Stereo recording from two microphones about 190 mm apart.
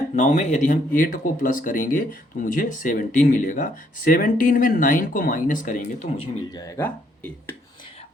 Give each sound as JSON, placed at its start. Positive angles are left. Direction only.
{"t": 0.2, "sound": "speech", "side_deg": 40}
{"t": 6.1, "sound": "speech", "side_deg": 20}